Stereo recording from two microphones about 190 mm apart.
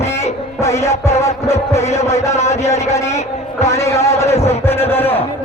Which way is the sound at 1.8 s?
35° left (ahead or behind).